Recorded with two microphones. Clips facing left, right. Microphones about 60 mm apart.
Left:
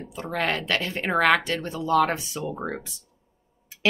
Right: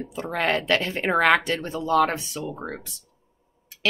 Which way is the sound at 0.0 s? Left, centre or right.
Centre.